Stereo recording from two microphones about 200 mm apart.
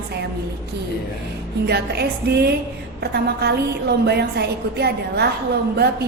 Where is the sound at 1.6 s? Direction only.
55° right (ahead or behind).